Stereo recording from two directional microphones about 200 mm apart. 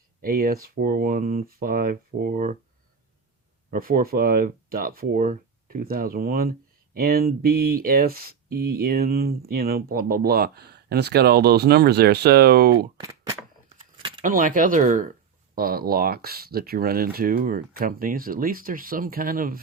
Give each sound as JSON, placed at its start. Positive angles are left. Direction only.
{"t": 0.2, "sound": "speech", "side_deg": -50}
{"t": 3.7, "sound": "speech", "side_deg": -45}
{"t": 13.0, "sound": "a sound", "side_deg": -20}
{"t": 14.2, "sound": "speech", "side_deg": -40}